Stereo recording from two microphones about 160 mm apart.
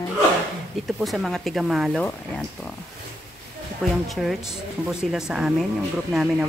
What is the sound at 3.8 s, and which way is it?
Speech, 5° left (ahead or behind).